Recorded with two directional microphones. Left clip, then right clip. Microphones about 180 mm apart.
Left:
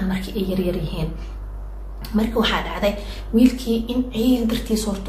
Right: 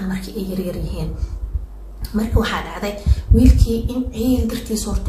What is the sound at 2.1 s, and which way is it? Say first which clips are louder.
A woman's voice: left 1 dB; 10° left (ahead or behind).